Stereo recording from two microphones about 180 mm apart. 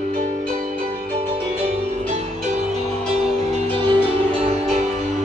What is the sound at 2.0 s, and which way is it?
Music, 40° right (ahead or behind).